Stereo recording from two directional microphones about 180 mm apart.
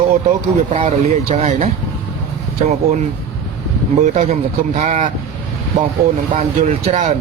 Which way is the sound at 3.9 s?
40° right (ahead or behind).